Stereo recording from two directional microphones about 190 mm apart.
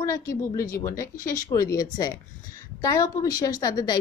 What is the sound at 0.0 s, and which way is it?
A woman's voice, 15° left (ahead or behind).